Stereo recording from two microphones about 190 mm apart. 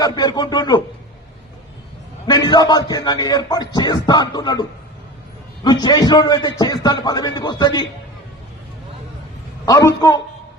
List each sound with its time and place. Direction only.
0.0 s a man's voice: 20° left (ahead or behind)
2.2 s a man's voice: 20° left (ahead or behind)
5.6 s a man's voice: 20° left (ahead or behind)
9.6 s a man's voice: 20° left (ahead or behind)